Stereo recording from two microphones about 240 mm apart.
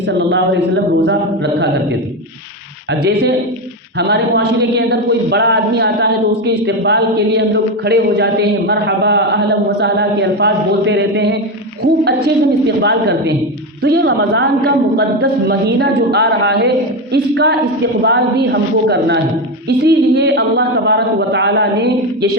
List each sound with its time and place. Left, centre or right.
0.1 s a man's voice: right
2.9 s a man's voice: right